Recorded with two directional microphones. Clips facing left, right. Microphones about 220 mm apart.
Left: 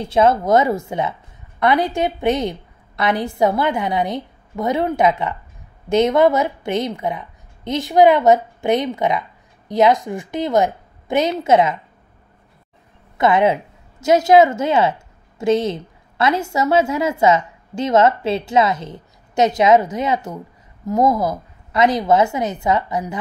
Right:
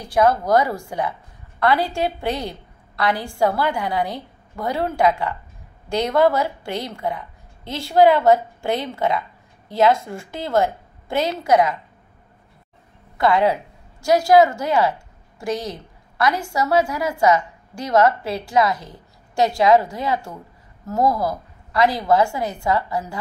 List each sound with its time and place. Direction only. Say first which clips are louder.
0.0 s a woman's voice: left 2 dB; 25° left (ahead or behind)
13.2 s a woman's voice: left 2 dB; 20° left (ahead or behind)